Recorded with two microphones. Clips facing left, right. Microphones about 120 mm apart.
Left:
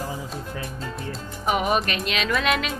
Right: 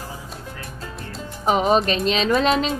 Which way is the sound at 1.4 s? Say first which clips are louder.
Right 5 dB; 30° right (ahead or behind).